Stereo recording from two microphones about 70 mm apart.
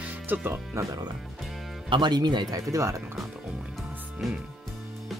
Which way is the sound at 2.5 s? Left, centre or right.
Right.